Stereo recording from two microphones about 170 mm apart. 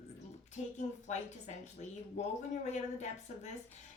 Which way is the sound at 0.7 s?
45° left (ahead or behind).